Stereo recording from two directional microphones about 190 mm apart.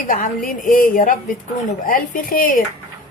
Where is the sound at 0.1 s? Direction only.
45° left (ahead or behind).